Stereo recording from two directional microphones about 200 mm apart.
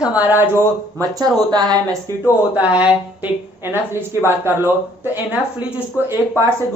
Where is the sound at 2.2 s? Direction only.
5° right (ahead or behind).